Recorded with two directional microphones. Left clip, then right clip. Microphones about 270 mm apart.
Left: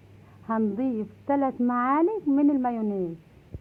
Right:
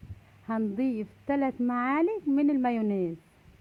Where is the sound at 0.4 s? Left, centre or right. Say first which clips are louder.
Left 3 dB; right.